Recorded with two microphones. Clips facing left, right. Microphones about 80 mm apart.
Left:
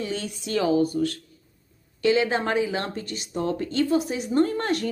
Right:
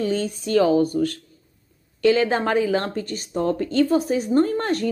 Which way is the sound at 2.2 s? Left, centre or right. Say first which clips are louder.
Right 4 dB; right.